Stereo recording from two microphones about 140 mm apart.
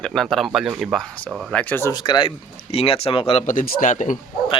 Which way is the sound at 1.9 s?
30° left (ahead or behind).